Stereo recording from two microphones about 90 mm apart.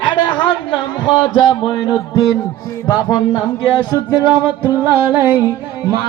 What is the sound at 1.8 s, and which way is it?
Music, 45° left (ahead or behind).